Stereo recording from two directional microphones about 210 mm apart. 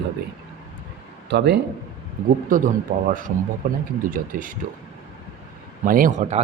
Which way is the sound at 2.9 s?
45° right (ahead or behind).